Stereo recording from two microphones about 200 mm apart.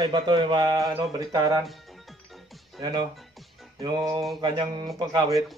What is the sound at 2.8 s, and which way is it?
Speech, 20° right (ahead or behind).